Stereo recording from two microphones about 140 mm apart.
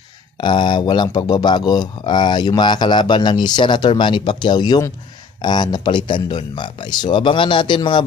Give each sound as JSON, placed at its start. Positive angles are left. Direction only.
{"t": 0.4, "sound": "speech", "side_deg": 35}